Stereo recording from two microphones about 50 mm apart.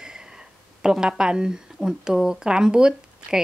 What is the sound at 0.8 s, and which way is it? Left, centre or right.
Speech, centre.